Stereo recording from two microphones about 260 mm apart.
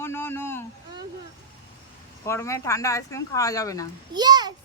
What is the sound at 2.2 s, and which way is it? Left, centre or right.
Speech, centre.